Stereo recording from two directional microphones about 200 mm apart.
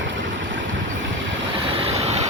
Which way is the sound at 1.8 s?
30° right (ahead or behind).